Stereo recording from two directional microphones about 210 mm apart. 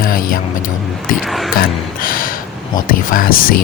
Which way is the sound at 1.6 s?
40° left (ahead or behind).